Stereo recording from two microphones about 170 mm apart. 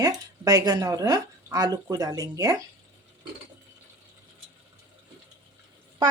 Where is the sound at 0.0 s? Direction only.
20° right (ahead or behind).